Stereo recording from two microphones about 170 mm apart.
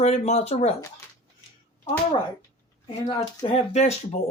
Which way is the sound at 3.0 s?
35° left (ahead or behind).